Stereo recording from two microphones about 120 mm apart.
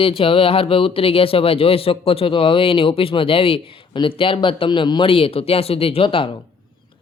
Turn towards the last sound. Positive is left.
turn(degrees=50)  # may be behind; listen again after turning